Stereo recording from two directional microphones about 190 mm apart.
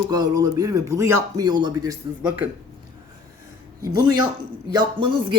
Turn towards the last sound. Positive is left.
turn(degrees=-25)  # may be behind; listen again after turning